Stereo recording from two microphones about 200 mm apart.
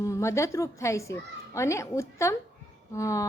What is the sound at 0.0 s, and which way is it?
Speech, 15° left (ahead or behind).